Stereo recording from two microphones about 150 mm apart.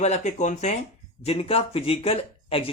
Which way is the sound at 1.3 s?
40° left (ahead or behind).